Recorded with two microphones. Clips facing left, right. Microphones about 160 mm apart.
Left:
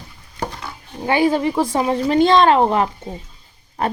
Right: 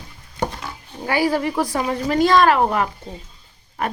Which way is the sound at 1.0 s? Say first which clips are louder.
Left 3 dB; 25° left (ahead or behind).